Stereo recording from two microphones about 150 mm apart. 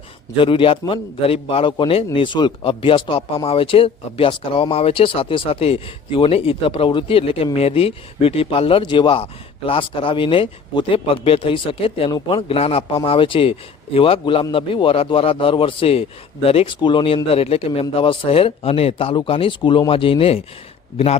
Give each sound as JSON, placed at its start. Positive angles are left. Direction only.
{"t": 0.3, "sound": "speech", "side_deg": 35}